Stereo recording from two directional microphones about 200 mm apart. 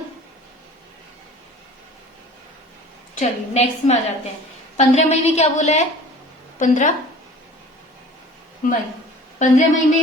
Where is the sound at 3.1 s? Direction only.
35° left (ahead or behind).